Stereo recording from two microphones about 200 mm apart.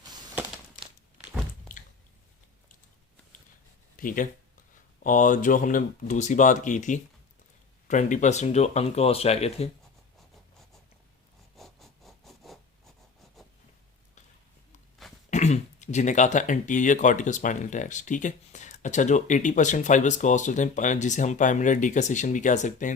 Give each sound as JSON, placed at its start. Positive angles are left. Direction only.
{"t": 3.9, "sound": "speech", "side_deg": 45}
{"t": 11.5, "sound": "a sound", "side_deg": 0}
{"t": 15.3, "sound": "speech", "side_deg": 35}